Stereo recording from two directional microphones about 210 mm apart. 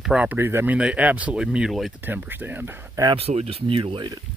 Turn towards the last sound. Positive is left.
turn(degrees=-20)  # may be behind; listen again after turning